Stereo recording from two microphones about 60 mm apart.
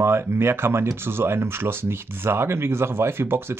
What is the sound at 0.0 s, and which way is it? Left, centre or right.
Speech, right.